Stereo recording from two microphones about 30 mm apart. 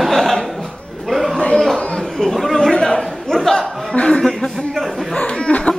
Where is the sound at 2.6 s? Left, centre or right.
Left.